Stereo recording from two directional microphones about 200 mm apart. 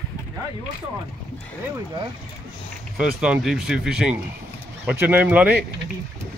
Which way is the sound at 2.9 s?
5° right (ahead or behind).